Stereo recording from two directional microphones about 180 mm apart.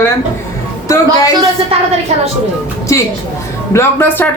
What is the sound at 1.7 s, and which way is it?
Speech, 30° right (ahead or behind).